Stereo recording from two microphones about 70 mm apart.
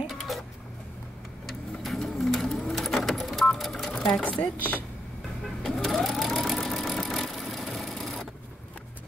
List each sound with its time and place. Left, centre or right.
0.0 s printer: centre
1.5 s sewing machine: centre
4.6 s speech: right
5.6 s sewing machine: centre